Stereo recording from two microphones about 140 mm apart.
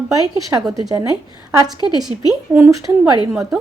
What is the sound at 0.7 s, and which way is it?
Speech, 25° right (ahead or behind).